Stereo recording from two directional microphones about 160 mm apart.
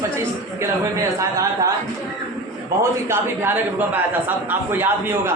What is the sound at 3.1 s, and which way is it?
A man's voice, 10° right (ahead or behind).